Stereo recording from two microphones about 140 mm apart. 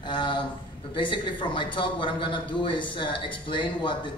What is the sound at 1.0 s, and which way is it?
A man's voice, 35° left (ahead or behind).